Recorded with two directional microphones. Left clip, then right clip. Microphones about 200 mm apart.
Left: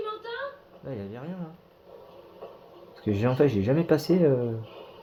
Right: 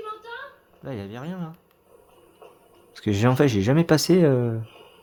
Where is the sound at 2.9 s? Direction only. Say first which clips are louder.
Right 4 dB; 45° right (ahead or behind).